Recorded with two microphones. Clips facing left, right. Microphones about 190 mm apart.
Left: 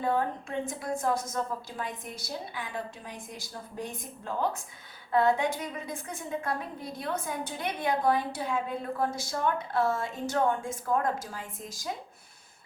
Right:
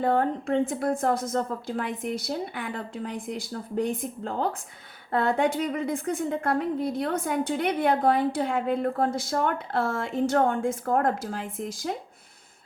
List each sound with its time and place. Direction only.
0.0 s a woman's voice: 60° right (ahead or behind)